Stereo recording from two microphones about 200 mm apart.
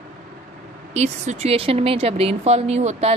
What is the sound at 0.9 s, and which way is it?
Speech, 35° right (ahead or behind).